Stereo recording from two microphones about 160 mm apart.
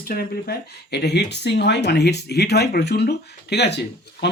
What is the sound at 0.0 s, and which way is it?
Speech, 70° left (ahead or behind).